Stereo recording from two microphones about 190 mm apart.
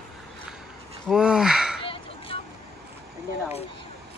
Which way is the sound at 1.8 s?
30° left (ahead or behind).